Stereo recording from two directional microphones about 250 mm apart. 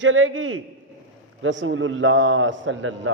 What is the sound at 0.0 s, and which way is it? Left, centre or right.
A man's voice, right.